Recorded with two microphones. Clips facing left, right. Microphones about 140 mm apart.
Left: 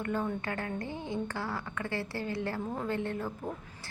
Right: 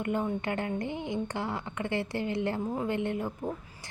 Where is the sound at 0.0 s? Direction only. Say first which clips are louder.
Right 3 dB; 20° right (ahead or behind).